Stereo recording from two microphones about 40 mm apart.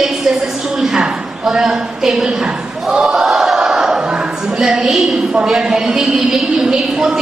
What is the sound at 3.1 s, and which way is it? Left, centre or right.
Battle cry, centre.